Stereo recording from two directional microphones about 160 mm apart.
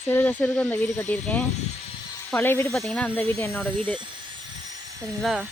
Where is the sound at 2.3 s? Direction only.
15° left (ahead or behind).